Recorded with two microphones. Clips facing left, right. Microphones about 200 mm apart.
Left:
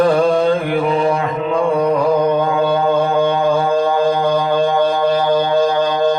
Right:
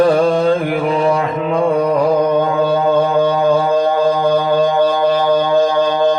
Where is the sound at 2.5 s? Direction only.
35° right (ahead or behind).